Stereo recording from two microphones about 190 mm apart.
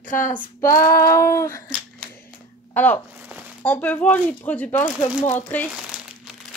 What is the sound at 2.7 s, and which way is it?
Speech, 10° left (ahead or behind).